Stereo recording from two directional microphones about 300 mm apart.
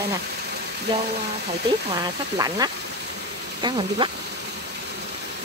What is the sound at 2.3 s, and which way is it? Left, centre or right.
Speech, centre.